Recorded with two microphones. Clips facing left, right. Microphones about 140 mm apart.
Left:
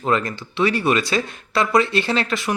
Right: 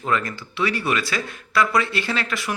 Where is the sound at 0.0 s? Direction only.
25° left (ahead or behind).